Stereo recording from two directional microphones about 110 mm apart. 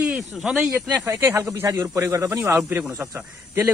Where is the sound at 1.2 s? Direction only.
25° right (ahead or behind).